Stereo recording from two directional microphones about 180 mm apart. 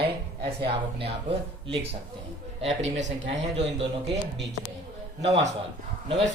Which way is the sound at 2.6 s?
40° right (ahead or behind).